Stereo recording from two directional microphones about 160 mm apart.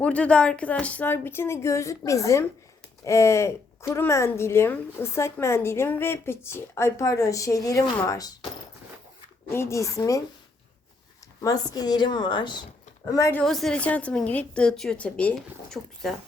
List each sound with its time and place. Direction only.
0.0 s a woman's voice: 5° left (ahead or behind)
9.5 s a woman's voice: 15° left (ahead or behind)
11.4 s a woman's voice: 25° left (ahead or behind)
13.3 s a woman's voice: centre (ahead or behind)